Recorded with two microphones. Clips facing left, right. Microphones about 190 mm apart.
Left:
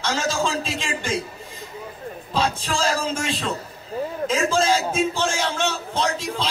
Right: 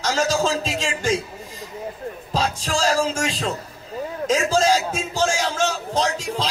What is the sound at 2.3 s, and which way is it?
A man's voice, 40° right (ahead or behind).